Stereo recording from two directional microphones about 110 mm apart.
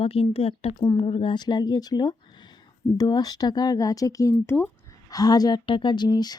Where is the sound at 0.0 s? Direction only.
60° left (ahead or behind).